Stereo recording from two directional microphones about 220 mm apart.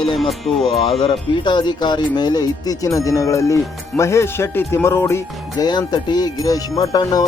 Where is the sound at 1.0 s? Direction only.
20° left (ahead or behind).